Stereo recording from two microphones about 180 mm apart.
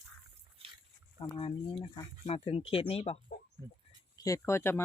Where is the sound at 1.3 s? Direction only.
30° left (ahead or behind).